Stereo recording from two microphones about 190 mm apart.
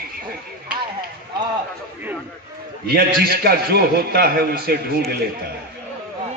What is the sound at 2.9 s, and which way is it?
A man's voice, 50° right (ahead or behind).